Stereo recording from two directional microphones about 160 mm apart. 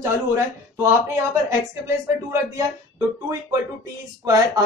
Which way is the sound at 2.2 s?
15° right (ahead or behind).